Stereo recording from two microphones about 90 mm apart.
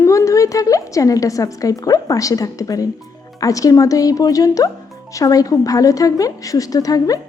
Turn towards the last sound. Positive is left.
turn(degrees=40)  # may be behind; listen again after turning